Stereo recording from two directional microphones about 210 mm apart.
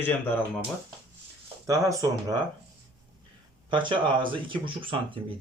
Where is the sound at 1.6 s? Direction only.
15° right (ahead or behind).